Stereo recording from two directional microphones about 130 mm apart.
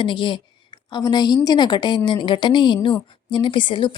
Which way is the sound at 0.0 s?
40° left (ahead or behind).